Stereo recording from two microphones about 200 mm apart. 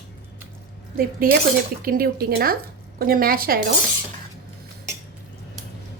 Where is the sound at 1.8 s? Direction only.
50° right (ahead or behind).